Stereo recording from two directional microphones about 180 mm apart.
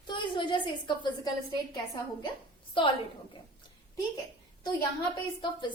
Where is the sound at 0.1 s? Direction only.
25° left (ahead or behind).